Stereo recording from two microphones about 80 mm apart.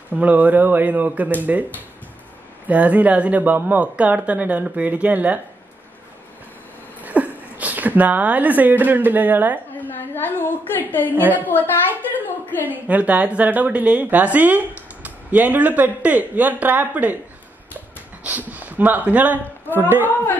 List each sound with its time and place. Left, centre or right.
0.1 s a woman's voice: right
2.7 s a woman's voice: centre
7.0 s speech: centre
9.8 s a woman's voice: left
11.1 s a woman's voice: right
12.6 s a woman's voice: right
18.5 s a woman's voice: right